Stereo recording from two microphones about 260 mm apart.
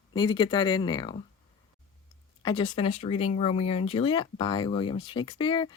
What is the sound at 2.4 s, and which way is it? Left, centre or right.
Speech, centre.